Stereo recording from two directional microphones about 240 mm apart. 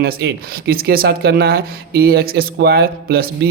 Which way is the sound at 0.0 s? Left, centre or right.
Right.